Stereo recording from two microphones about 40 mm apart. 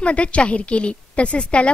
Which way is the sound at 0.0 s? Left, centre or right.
Left.